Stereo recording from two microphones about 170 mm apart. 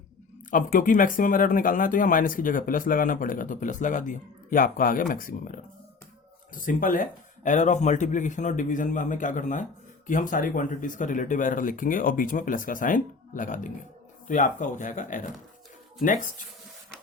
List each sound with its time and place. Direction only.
0.5 s speech: 55° left (ahead or behind)